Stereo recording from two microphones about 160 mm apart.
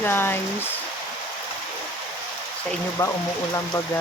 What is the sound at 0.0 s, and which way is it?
Speech, 15° left (ahead or behind).